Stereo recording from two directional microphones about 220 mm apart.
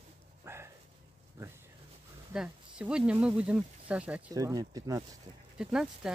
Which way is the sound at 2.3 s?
5° right (ahead or behind).